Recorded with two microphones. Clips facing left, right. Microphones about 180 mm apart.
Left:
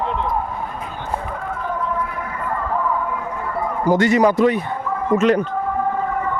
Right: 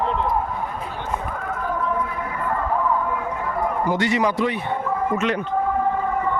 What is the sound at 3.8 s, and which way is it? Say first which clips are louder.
A man's voice: left 8 dB; 45° left (ahead or behind).